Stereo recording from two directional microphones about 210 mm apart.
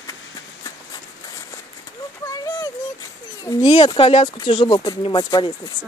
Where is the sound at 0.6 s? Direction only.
15° left (ahead or behind).